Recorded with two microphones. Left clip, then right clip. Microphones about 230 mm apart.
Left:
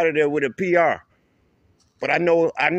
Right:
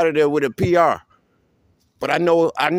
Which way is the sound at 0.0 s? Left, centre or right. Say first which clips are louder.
Right 2 dB; right.